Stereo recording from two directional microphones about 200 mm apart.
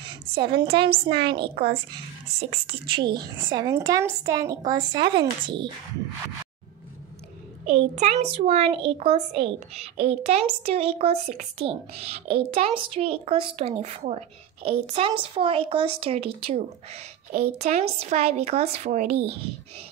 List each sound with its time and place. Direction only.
0.0 s a child's voice: 25° right (ahead or behind)
1.5 s speech: 50° right (ahead or behind)
2.6 s a woman's voice: 25° right (ahead or behind)
7.7 s a woman's voice: 35° right (ahead or behind)